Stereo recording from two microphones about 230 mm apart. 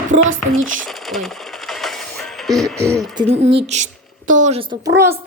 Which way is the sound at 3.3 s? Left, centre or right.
Right.